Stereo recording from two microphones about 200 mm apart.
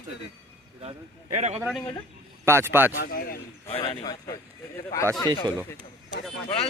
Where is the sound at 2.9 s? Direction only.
45° left (ahead or behind).